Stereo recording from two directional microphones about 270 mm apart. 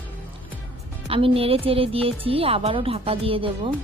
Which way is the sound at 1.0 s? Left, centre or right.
Right.